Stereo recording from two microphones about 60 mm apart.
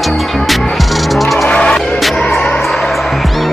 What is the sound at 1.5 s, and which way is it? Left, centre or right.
Music, centre.